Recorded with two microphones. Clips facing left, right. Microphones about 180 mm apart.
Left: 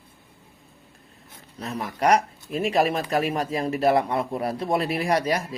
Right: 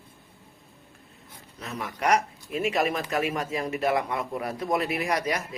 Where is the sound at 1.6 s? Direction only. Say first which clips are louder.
Left 5 dB; 35° left (ahead or behind).